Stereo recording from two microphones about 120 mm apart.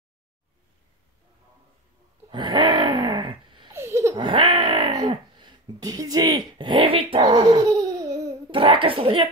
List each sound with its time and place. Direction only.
2.3 s groan: 40° right (ahead or behind)
3.7 s laughter: 25° right (ahead or behind)
4.2 s groan: 45° right (ahead or behind)
5.4 s speech: 35° right (ahead or behind)
7.3 s babbling: 30° right (ahead or behind)
8.5 s a child's voice: 45° right (ahead or behind)